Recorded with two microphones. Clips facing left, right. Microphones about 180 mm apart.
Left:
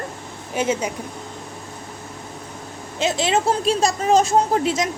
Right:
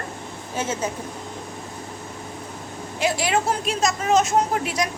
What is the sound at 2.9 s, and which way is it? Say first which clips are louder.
Speech: left 2 dB; 25° left (ahead or behind).